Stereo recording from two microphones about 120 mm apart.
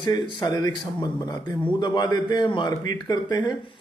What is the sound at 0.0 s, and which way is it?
A man's voice, 35° left (ahead or behind).